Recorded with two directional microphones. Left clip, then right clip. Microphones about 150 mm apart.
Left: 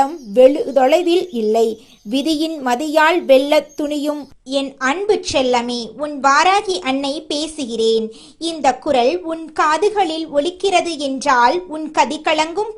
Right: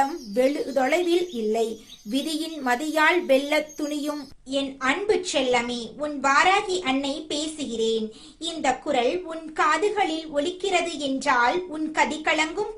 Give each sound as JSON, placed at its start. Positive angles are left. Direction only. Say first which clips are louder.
{"t": 0.0, "sound": "a woman's voice", "louder": "left 11 dB", "side_deg": 35}